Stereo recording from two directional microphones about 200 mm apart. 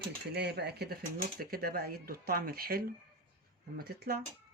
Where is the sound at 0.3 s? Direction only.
55° right (ahead or behind).